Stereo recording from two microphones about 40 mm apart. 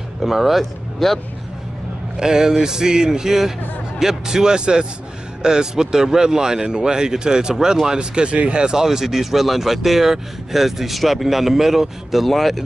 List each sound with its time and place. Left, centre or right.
0.2 s speech: centre
2.1 s speech: centre